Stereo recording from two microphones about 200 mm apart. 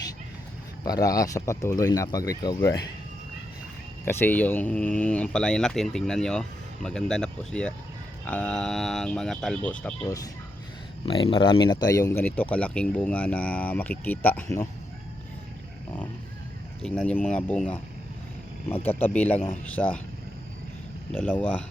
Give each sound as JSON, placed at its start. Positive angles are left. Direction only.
{"t": 0.9, "sound": "a man's voice", "side_deg": 15}
{"t": 4.0, "sound": "speech", "side_deg": 10}
{"t": 11.0, "sound": "a man's voice", "side_deg": 25}
{"t": 16.8, "sound": "a man's voice", "side_deg": 5}
{"t": 18.9, "sound": "a man's voice", "side_deg": 10}
{"t": 21.1, "sound": "a man's voice", "side_deg": 5}